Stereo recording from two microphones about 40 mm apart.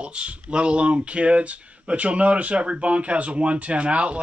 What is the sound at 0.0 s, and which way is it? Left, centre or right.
Speech, right.